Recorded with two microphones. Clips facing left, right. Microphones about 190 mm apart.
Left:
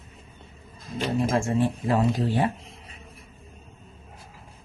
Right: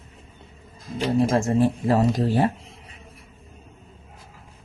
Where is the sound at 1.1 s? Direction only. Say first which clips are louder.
Right 4 dB; 35° right (ahead or behind).